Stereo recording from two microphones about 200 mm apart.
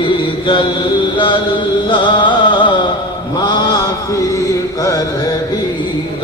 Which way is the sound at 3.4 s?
20° left (ahead or behind).